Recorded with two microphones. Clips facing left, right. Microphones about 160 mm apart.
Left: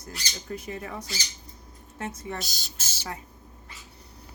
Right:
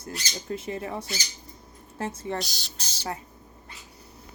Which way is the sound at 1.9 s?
30° right (ahead or behind).